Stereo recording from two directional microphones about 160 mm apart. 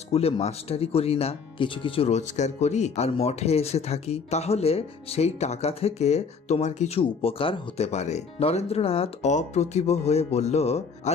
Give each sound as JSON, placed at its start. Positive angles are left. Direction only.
{"t": 0.1, "sound": "speech", "side_deg": 40}